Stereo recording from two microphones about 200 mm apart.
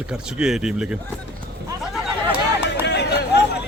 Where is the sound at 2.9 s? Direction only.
55° left (ahead or behind).